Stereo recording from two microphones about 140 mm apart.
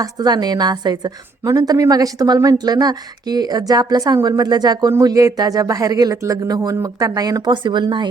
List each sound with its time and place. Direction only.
0.0 s a woman's voice: 30° right (ahead or behind)